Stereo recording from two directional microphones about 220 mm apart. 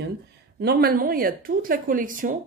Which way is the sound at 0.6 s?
45° right (ahead or behind).